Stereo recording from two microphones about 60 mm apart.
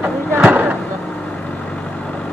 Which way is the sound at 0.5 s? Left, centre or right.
Right.